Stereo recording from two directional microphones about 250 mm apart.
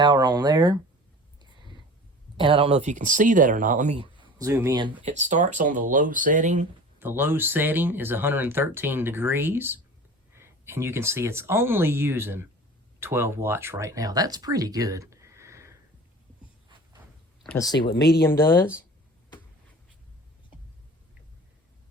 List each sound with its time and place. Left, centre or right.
0.0 s speech: centre
2.4 s speech: right
5.0 s speech: right
7.0 s speech: centre
17.6 s speech: centre